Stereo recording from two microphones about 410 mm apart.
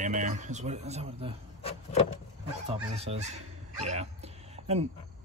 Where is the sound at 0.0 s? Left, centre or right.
Centre.